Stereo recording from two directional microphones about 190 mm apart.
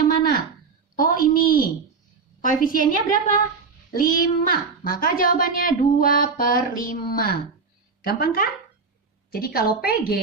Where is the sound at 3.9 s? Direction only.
45° left (ahead or behind).